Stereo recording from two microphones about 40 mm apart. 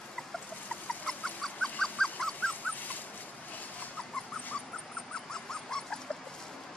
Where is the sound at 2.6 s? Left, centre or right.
Left.